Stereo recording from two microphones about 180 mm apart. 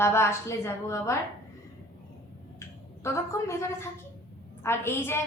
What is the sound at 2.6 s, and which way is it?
A woman's voice, 15° left (ahead or behind).